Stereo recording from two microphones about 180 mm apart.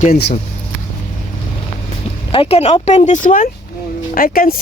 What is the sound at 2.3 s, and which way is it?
Speech, 30° left (ahead or behind).